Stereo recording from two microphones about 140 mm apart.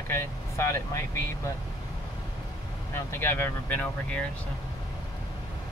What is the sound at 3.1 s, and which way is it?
Speech, 15° left (ahead or behind).